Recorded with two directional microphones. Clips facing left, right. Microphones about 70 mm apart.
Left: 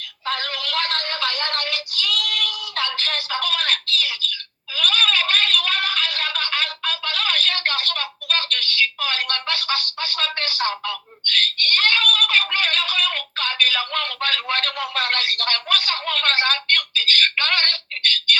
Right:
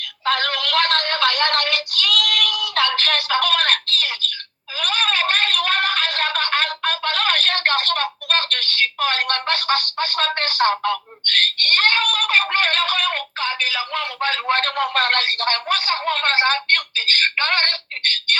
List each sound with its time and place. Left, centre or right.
0.3 s synthetic singing: right
4.7 s a sound: right
13.4 s telephone: centre; by 18.3 s right